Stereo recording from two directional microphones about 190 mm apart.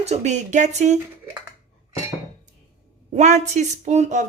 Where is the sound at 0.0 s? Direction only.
35° right (ahead or behind).